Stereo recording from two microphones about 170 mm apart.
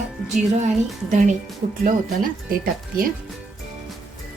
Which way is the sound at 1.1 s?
45° right (ahead or behind).